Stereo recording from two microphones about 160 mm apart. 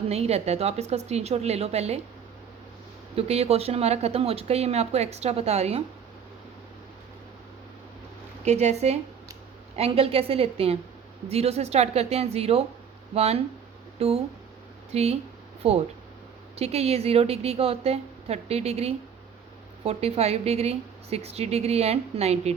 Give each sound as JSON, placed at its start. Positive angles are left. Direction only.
{"t": 0.1, "sound": "a woman's voice", "side_deg": -40}
{"t": 3.2, "sound": "a woman's voice", "side_deg": -40}
{"t": 8.4, "sound": "a woman's voice", "side_deg": -45}